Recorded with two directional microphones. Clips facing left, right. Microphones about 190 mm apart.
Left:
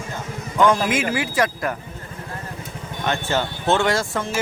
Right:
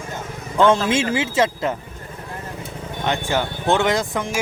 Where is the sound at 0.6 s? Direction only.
25° right (ahead or behind).